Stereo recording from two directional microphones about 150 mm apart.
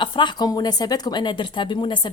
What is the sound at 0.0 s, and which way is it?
Speech, 30° left (ahead or behind).